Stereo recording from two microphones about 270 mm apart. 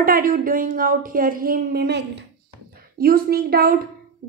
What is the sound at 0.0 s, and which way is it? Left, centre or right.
A woman's voice, right.